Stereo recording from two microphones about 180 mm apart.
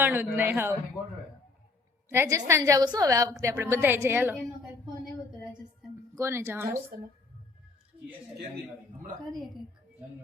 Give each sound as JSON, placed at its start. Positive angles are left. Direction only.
{"t": 0.0, "sound": "a woman's voice", "side_deg": -10}
{"t": 2.0, "sound": "a woman's voice", "side_deg": -15}
{"t": 6.1, "sound": "a woman's voice", "side_deg": -15}
{"t": 6.9, "sound": "speech", "side_deg": -55}